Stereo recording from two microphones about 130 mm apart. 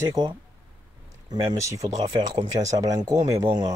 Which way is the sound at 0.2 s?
30° right (ahead or behind).